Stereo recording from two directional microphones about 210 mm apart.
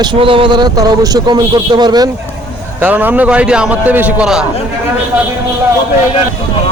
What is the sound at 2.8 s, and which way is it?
A man's voice, 10° right (ahead or behind).